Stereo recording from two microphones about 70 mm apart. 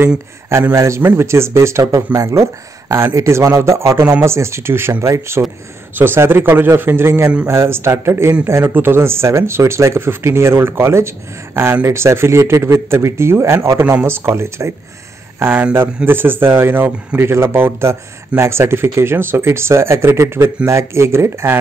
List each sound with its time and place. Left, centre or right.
0.7 s speech: right
1.8 s speech: right
2.1 s speech: right